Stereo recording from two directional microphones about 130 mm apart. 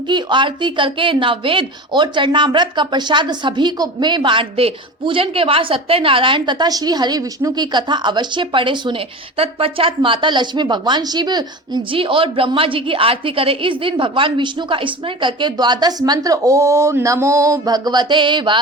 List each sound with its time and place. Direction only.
0.1 s speech: 35° right (ahead or behind)